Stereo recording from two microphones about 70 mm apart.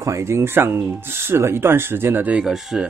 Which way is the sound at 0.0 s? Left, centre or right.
Right.